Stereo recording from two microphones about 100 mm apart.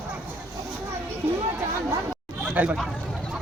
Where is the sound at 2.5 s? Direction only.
15° right (ahead or behind).